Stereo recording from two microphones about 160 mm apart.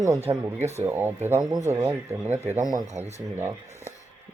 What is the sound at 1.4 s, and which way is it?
Speech, 25° right (ahead or behind).